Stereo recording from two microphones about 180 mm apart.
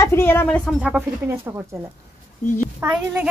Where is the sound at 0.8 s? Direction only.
10° right (ahead or behind).